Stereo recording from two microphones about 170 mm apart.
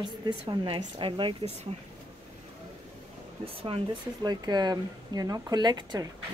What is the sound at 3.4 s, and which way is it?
Speech, 35° right (ahead or behind).